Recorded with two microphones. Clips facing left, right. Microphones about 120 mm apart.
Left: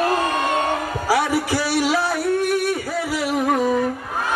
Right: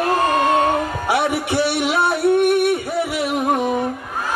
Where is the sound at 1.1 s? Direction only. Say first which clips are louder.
Left 1 dB; 25° right (ahead or behind).